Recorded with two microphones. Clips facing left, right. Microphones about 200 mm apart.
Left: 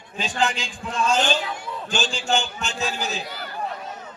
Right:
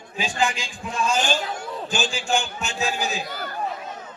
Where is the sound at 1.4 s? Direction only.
45° right (ahead or behind).